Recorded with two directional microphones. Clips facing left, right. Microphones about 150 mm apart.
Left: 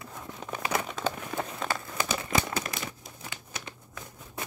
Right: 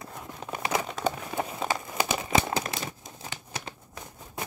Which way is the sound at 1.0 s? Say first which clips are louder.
Right 2 dB; 15° right (ahead or behind).